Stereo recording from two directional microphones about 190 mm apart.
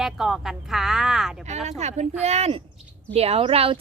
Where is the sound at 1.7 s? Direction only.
35° right (ahead or behind).